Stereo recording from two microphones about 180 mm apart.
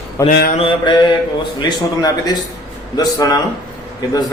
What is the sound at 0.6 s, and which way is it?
Speech, 25° left (ahead or behind).